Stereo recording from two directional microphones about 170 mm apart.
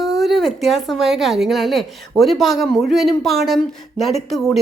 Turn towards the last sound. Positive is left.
turn(degrees=0)  # may be behind; listen again after turning